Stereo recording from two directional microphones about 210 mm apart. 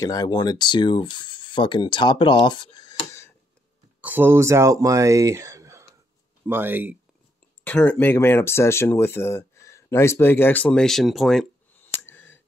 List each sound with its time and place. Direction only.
0.0 s speech: 15° left (ahead or behind)
4.0 s speech: 10° right (ahead or behind)
7.6 s speech: 5° left (ahead or behind)
11.9 s a sound: 10° left (ahead or behind)